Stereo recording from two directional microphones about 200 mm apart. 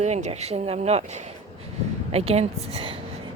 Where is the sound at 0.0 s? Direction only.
35° right (ahead or behind).